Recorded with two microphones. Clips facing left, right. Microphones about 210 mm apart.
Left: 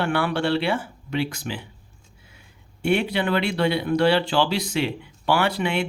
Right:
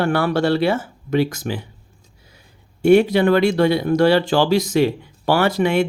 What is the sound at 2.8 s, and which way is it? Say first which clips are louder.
Speech: right 9 dB; 45° right (ahead or behind).